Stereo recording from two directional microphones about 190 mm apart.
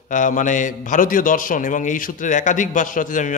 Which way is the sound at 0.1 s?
40° left (ahead or behind).